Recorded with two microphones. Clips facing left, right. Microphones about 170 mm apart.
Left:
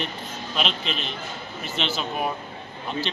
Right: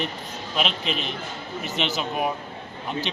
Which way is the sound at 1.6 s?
15° right (ahead or behind).